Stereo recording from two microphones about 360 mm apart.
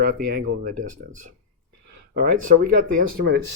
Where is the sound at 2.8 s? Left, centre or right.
Right.